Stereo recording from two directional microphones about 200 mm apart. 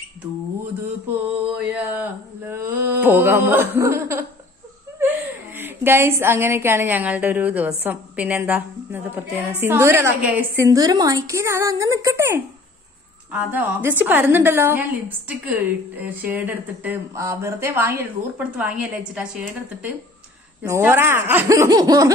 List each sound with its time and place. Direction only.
1.6 s a woman's voice: 10° right (ahead or behind)